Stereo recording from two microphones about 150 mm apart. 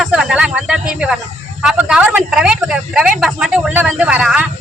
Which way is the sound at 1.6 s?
5° right (ahead or behind).